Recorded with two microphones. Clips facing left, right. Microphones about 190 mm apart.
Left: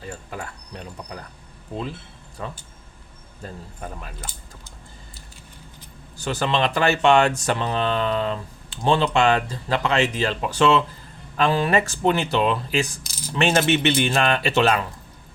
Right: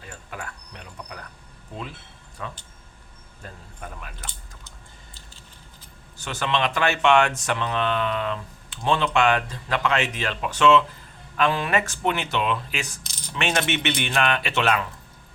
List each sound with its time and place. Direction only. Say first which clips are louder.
0.0 s a sound: left 4 dB; 35° left (ahead or behind)
2.4 s speech: left 3 dB; 35° left (ahead or behind)
6.1 s speech: left 3 dB; 35° left (ahead or behind)
13.1 s coin: left 6 dB; 5° left (ahead or behind)
13.3 s speech: left 6 dB; 35° left (ahead or behind)